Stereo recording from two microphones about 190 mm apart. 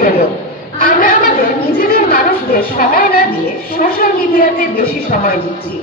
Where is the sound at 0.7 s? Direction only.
45° left (ahead or behind).